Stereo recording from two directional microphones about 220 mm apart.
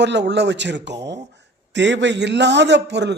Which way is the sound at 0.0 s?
50° right (ahead or behind).